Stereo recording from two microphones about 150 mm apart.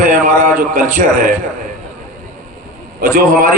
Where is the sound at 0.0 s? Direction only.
60° right (ahead or behind).